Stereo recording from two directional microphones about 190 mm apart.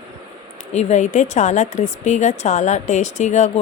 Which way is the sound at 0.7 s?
35° left (ahead or behind).